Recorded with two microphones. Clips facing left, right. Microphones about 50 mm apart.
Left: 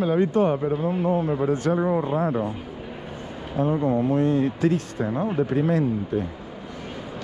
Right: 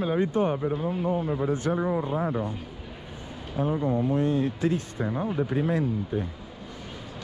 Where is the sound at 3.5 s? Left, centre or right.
Left.